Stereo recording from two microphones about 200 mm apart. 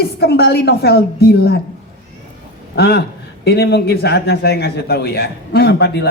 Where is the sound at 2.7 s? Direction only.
50° left (ahead or behind).